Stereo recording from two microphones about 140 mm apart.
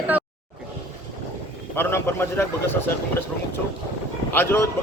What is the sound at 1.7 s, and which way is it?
A man's voice, 15° left (ahead or behind).